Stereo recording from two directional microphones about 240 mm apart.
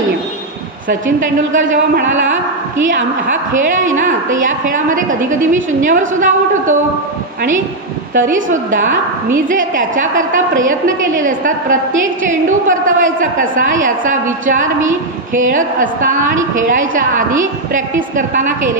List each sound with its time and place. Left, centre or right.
0.8 s a woman's voice: right
3.9 s a woman's voice: right
8.1 s a woman's voice: right